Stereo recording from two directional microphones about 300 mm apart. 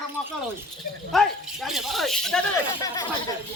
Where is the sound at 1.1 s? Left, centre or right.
Centre.